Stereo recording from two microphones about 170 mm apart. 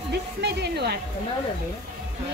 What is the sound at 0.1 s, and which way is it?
Speech, 80° right.